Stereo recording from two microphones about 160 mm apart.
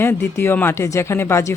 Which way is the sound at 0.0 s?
15° left (ahead or behind).